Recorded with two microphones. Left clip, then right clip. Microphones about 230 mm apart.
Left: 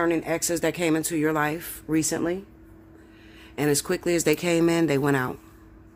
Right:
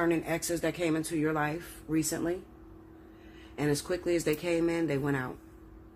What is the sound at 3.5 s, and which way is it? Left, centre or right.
Speech, left.